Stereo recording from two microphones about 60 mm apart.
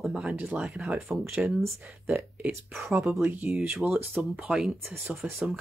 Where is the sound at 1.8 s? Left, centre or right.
Right.